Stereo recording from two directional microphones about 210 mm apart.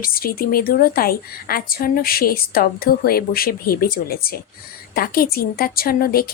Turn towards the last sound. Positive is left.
turn(degrees=45)  # may be behind; listen again after turning